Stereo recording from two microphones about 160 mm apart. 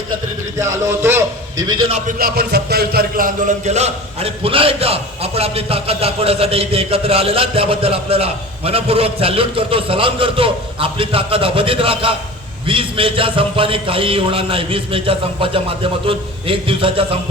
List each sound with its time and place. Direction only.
0.6 s a man's voice: 15° right (ahead or behind)
2.1 s a man's voice: 75° right (ahead or behind); by 17.2 s 35° right (ahead or behind)